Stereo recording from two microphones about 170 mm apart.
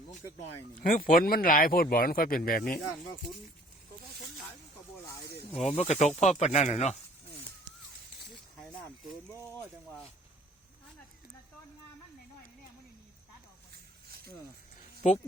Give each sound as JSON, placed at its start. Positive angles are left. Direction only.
{"t": 0.8, "sound": "speech", "side_deg": 55}
{"t": 5.6, "sound": "speech", "side_deg": 40}
{"t": 9.3, "sound": "speech", "side_deg": 10}
{"t": 14.1, "sound": "a sound", "side_deg": -65}
{"t": 15.0, "sound": "speech", "side_deg": 45}